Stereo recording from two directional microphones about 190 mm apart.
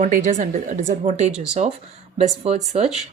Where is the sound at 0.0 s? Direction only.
40° right (ahead or behind).